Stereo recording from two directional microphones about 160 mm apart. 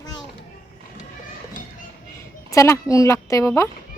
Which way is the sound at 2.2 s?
20° left (ahead or behind).